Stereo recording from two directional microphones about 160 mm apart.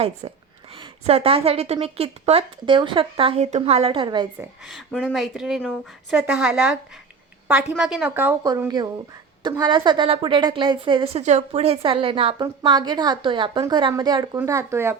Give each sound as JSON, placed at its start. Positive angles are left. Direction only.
{"t": 0.8, "sound": "a woman's voice", "side_deg": -40}
{"t": 4.6, "sound": "a woman's voice", "side_deg": 0}
{"t": 8.4, "sound": "a woman's voice", "side_deg": -20}